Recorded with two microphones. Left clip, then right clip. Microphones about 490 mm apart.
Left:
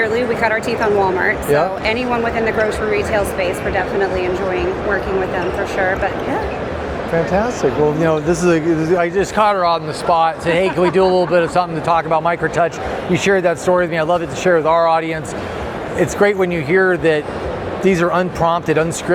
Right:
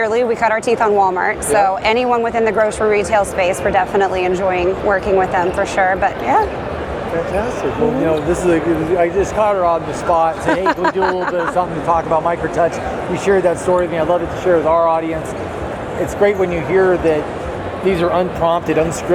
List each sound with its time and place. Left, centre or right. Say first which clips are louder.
0.0 s speech: right 1 dB; right
8.0 s speech: even; left
16.2 s speech: right 2 dB; left
17.8 s speech: even; left